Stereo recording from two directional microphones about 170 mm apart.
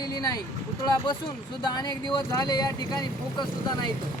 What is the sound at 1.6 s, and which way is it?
Speech, 25° left (ahead or behind).